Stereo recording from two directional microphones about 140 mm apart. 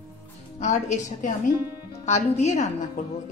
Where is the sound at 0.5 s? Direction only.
60° left (ahead or behind).